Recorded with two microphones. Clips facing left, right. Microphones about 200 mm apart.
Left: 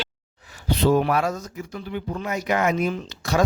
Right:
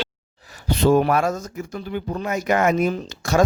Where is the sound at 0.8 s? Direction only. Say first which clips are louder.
Right 3 dB; 45° right (ahead or behind).